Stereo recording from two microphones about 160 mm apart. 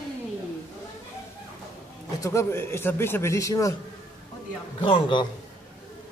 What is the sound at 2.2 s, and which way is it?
A man's voice, 15° left (ahead or behind).